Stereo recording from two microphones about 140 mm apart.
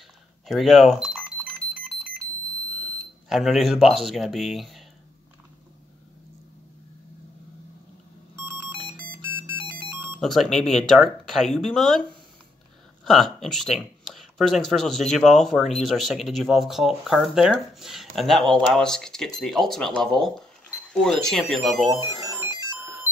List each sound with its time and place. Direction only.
0.5 s a sound: centre (ahead or behind)
3.3 s speech: centre (ahead or behind)
8.9 s beep: 10° left (ahead or behind)
9.3 s music: 15° right (ahead or behind)
10.2 s speech: centre (ahead or behind)
22.6 s music: 20° right (ahead or behind)